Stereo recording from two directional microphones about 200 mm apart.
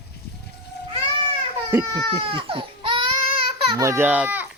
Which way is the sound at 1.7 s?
20° right (ahead or behind).